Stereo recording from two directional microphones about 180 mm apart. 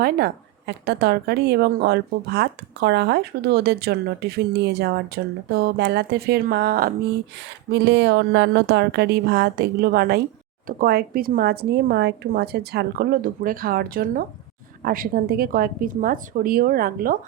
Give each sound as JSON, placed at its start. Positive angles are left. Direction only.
{"t": 0.7, "sound": "a woman's voice", "side_deg": -65}
{"t": 7.7, "sound": "a woman's voice", "side_deg": -70}